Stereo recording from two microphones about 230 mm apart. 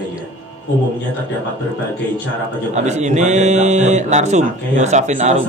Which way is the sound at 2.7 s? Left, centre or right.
Right.